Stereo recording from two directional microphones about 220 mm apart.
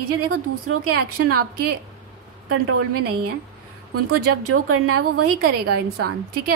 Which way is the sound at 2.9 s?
90° right.